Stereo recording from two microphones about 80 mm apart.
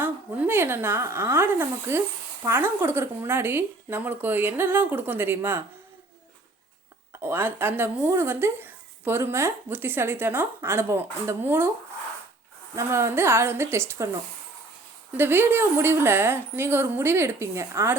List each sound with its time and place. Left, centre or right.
0.0 s a woman's voice: right
7.2 s speech: right
12.7 s a woman's voice: right
15.1 s speech: right